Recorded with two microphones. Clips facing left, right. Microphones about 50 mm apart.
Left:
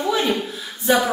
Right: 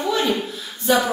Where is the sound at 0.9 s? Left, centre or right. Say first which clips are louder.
Even; centre.